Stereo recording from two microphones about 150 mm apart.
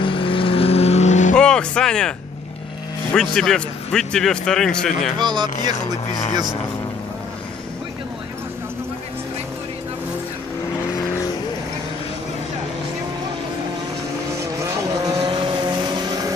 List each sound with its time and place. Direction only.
0.0 s vehicle: 35° left (ahead or behind)
1.3 s a man's voice: 5° left (ahead or behind)
5.2 s speech: 30° right (ahead or behind)
14.4 s vehicle: 20° right (ahead or behind)
15.1 s vehicle: 35° right (ahead or behind)